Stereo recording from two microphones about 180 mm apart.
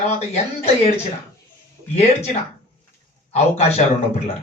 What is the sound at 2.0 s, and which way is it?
Speech, 35° left (ahead or behind).